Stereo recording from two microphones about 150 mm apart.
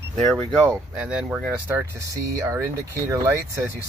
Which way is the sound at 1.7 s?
20° right (ahead or behind).